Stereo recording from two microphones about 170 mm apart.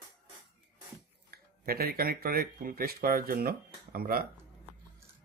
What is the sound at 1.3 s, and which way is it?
Speech, 65° right (ahead or behind).